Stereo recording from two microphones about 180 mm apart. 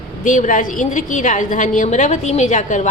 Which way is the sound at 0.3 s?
45° left (ahead or behind).